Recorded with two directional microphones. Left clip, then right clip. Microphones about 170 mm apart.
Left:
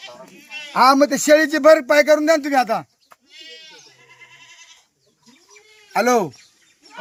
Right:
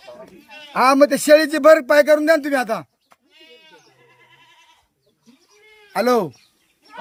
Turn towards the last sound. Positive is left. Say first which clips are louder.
# left 1 dB
turn(degrees=-20)  # may be behind; listen again after turning